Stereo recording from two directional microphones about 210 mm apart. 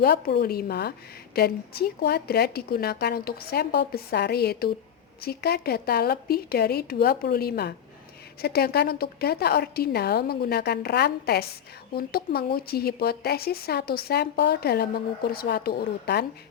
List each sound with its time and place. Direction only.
0.0 s speech: 50° left (ahead or behind)